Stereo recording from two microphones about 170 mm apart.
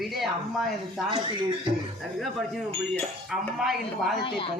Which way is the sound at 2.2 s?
Centre (ahead or behind).